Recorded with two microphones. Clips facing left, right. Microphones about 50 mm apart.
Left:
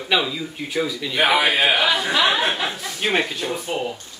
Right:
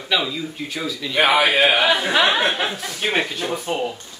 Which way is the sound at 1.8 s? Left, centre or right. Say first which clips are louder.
Right 2 dB; right.